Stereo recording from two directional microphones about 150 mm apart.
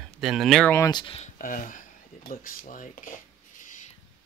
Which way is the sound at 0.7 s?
25° left (ahead or behind).